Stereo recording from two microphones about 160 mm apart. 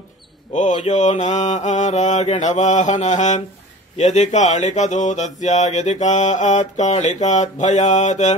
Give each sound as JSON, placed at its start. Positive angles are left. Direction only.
{"t": 0.5, "sound": "speech", "side_deg": 50}